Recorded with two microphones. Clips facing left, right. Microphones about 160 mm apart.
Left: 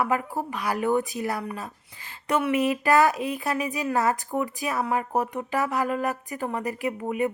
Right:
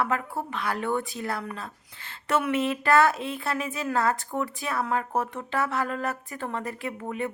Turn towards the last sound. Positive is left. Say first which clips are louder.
# left 5 dB
turn(degrees=15)  # may be behind; listen again after turning